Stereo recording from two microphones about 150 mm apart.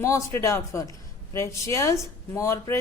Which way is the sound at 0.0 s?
20° left (ahead or behind).